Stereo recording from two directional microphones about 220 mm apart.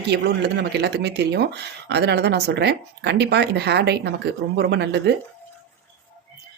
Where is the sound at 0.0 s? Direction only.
50° right (ahead or behind).